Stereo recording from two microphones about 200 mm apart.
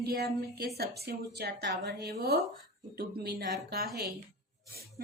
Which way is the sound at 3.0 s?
55° right (ahead or behind).